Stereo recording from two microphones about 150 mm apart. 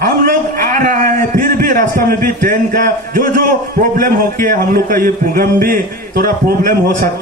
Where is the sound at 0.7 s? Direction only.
65° right (ahead or behind).